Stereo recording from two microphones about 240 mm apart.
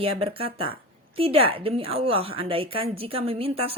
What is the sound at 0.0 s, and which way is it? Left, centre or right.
A woman's voice, right.